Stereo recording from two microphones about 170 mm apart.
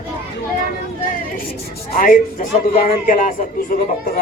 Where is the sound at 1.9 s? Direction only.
55° left (ahead or behind).